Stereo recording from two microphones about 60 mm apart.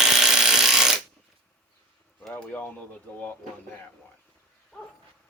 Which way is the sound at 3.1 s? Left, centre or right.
Left.